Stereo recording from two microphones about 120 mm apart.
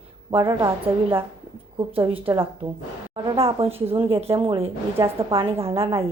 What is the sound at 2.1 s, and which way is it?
Speech, 50° right (ahead or behind).